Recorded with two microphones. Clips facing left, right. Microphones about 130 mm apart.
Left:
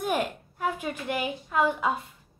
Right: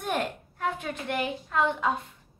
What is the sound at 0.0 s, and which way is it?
A woman's voice, 5° left (ahead or behind).